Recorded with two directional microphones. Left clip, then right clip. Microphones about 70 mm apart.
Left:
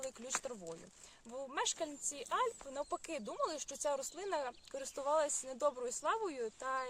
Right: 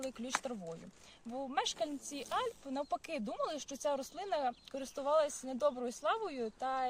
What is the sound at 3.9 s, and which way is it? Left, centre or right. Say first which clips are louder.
Speech: right 2 dB; left.